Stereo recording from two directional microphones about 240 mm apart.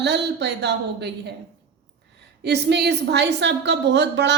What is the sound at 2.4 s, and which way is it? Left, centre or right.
A woman's voice, right.